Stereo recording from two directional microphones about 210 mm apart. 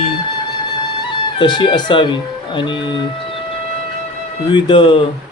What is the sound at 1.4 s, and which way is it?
Speech, 20° left (ahead or behind).